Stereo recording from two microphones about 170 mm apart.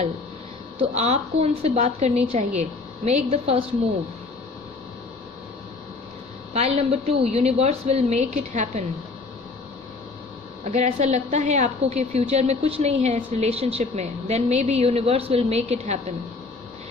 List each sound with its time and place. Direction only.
0.8 s a woman's voice: 40° right (ahead or behind)
6.5 s a woman's voice: 40° right (ahead or behind)
10.6 s a woman's voice: 40° right (ahead or behind)